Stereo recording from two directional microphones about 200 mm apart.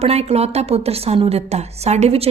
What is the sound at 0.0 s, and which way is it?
A woman's voice, 30° right (ahead or behind).